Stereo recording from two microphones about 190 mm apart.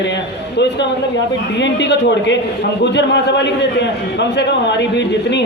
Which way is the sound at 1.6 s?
65° left (ahead or behind).